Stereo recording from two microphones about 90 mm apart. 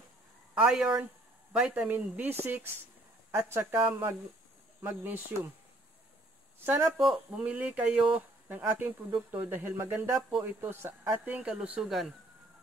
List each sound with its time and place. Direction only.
0.6 s speech: 10° right (ahead or behind)
6.6 s speech: 25° right (ahead or behind); by 8.2 s 5° right (ahead or behind)
8.5 s speech: 20° right (ahead or behind)